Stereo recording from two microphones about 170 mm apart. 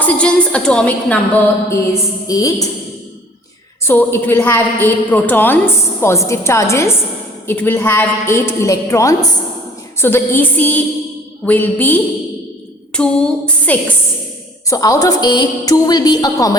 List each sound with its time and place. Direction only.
0.0 s a woman's voice: 5° left (ahead or behind)
3.8 s a woman's voice: 15° left (ahead or behind)
14.7 s a woman's voice: 20° left (ahead or behind)